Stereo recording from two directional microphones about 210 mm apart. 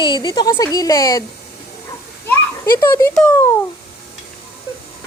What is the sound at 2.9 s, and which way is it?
Speech, 10° left (ahead or behind).